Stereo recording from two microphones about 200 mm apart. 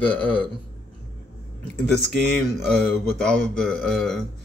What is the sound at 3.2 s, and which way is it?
Speech, 5° left (ahead or behind).